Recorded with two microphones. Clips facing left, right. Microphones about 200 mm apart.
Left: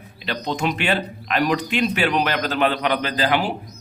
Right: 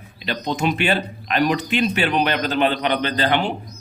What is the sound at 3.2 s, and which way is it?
Speech, 5° left (ahead or behind).